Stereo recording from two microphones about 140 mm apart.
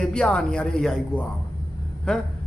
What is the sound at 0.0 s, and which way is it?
A man's voice, 5° left (ahead or behind).